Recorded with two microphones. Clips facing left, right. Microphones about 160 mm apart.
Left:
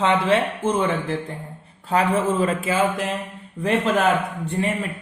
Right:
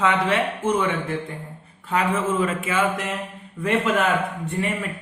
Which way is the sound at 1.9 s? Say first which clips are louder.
Left 2 dB; 35° left (ahead or behind).